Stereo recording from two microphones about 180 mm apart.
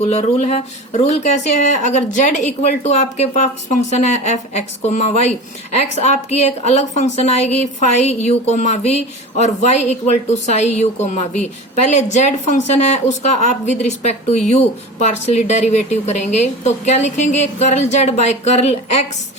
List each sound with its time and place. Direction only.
0.0 s a woman's voice: 35° left (ahead or behind)